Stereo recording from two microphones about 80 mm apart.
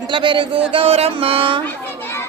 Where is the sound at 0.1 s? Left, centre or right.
Right.